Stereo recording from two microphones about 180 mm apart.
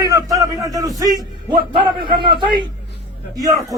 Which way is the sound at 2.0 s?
25° right (ahead or behind).